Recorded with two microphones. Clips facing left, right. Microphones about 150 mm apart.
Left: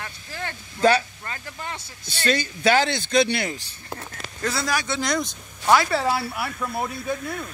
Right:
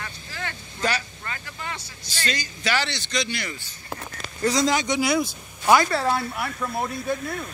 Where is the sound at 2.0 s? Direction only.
55° left (ahead or behind).